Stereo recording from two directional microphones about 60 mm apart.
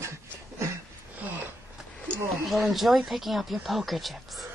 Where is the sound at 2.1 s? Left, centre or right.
Centre.